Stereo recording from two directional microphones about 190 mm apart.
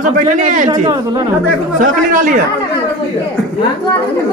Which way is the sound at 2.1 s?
45° right (ahead or behind).